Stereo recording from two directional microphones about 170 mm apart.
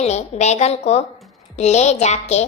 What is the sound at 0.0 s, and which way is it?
A woman's voice, 40° left (ahead or behind).